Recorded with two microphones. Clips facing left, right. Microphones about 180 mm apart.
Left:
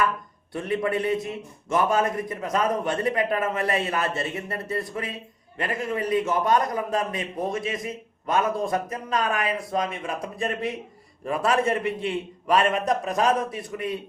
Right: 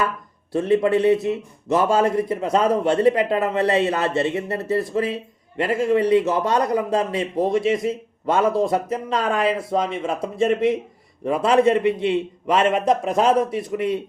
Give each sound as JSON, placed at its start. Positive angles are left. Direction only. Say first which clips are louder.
{"t": 0.5, "sound": "a man's voice", "louder": "right 8 dB", "side_deg": -25}
{"t": 11.4, "sound": "a man's voice", "louder": "right 7 dB", "side_deg": -25}